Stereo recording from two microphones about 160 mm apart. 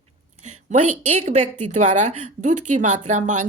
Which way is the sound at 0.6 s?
50° right (ahead or behind).